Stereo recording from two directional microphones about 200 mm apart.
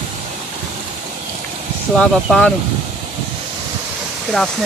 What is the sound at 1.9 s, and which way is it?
Speech, 5° left (ahead or behind).